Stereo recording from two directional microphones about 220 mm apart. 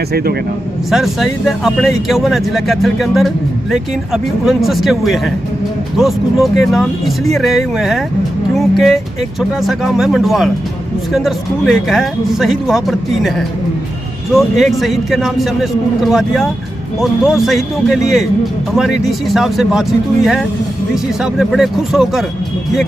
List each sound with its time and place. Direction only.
0.1 s speech: 45° right (ahead or behind)
0.8 s speech: centre (ahead or behind)
14.3 s speech: centre (ahead or behind)